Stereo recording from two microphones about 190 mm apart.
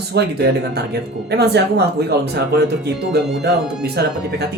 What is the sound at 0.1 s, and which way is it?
Speech, 60° right (ahead or behind).